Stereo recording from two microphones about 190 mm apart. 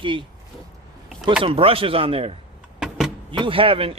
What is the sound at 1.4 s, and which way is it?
A man's voice, 30° right (ahead or behind).